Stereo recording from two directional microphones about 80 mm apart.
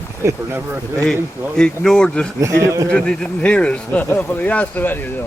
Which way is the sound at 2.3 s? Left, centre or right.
Right.